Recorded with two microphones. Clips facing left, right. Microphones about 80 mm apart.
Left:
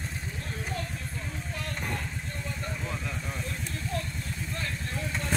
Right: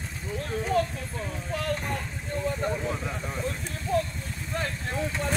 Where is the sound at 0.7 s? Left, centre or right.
Right.